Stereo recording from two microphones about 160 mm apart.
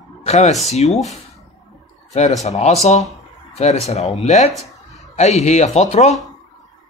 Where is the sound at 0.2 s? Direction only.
45° left (ahead or behind).